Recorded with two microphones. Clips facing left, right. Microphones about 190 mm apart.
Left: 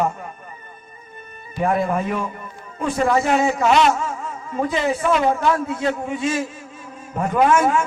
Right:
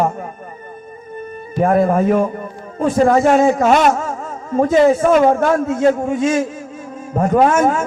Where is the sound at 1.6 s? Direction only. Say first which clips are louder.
Right 6 dB; 45° right (ahead or behind).